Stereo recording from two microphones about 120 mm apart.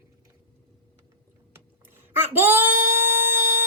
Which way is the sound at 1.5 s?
20° right (ahead or behind).